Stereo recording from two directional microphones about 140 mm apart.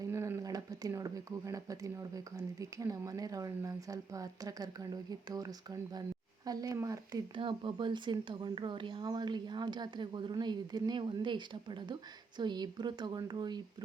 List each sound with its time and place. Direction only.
0.0 s speech: 20° right (ahead or behind)